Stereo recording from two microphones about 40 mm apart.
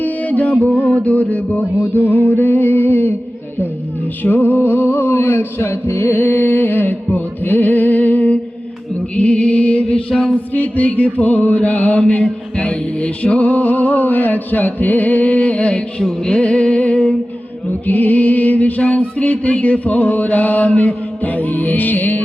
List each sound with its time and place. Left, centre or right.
0.0 s music: left
1.0 s mantra: left
2.2 s a sound: left
4.2 s a sound: left
9.1 s music: left
10.5 s mantra: left
11.9 s mantra: left
16.0 s music: centre
16.4 s music: left
17.7 s music: left